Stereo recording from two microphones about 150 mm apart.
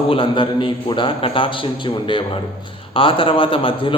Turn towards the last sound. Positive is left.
turn(degrees=35)  # may be behind; listen again after turning